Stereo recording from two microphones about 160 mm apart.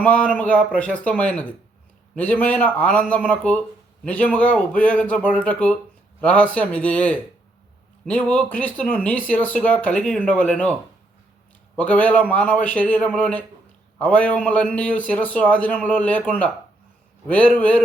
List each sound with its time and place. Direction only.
0.0 s a man's voice: 10° left (ahead or behind)
11.8 s a man's voice: 10° left (ahead or behind)